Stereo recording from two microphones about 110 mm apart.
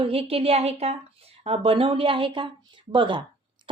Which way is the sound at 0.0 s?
60° right (ahead or behind).